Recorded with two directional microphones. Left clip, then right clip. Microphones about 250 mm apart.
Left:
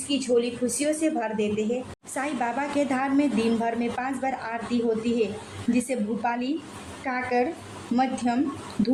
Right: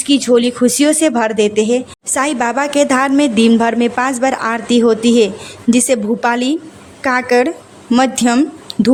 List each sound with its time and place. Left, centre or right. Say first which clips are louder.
0.1 s a woman's voice: right 12 dB; right